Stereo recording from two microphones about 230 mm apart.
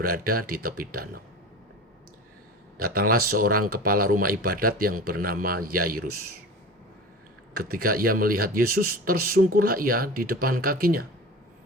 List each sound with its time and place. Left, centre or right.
0.0 s speech: right
2.7 s speech: right
7.5 s speech: right